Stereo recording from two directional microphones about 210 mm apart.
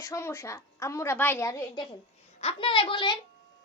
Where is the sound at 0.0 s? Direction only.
15° left (ahead or behind).